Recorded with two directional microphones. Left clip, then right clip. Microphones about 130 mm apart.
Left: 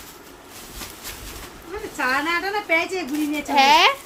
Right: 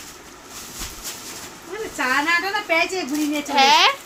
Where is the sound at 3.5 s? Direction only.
50° left (ahead or behind).